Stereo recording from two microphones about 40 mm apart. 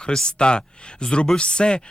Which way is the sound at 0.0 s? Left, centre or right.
Left.